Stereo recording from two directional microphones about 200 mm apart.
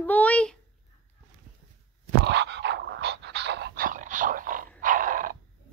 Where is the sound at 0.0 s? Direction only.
10° left (ahead or behind).